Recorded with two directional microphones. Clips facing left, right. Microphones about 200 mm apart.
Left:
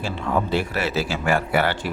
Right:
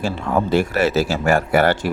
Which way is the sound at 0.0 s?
45° right (ahead or behind).